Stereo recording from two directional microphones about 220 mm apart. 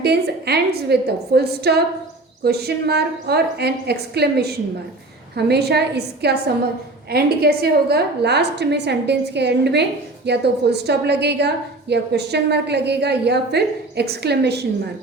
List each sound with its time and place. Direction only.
0.0 s a woman's voice: 45° right (ahead or behind)